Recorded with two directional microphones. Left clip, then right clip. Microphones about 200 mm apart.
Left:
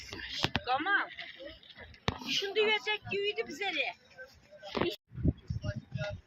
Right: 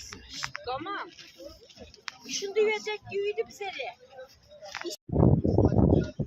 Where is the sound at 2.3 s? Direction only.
55° right (ahead or behind).